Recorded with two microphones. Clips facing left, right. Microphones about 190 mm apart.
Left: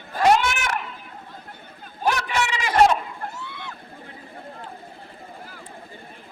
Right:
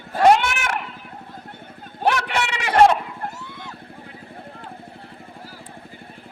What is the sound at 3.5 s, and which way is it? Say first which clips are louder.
Vehicle: even; 40° right (ahead or behind).